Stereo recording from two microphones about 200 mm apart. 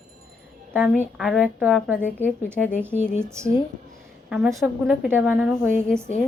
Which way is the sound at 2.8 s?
10° right (ahead or behind).